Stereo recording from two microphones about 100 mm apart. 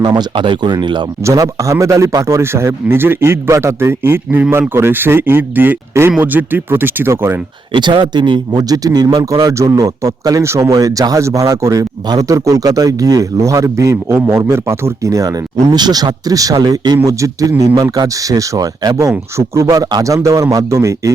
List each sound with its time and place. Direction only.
0.0 s speech: 45° right (ahead or behind)
1.2 s a man's voice: 35° right (ahead or behind)
7.7 s speech: 50° right (ahead or behind)
17.1 s speech: 35° right (ahead or behind)